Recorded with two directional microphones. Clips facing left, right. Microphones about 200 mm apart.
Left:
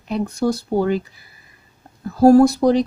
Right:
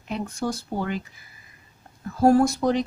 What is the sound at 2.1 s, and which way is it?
Speech, 35° left (ahead or behind).